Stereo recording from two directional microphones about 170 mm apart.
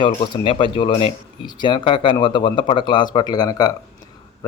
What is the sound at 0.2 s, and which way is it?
Speech, 30° left (ahead or behind).